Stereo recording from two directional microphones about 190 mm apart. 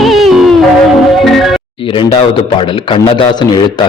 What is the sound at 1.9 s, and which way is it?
A man's voice, 25° left (ahead or behind).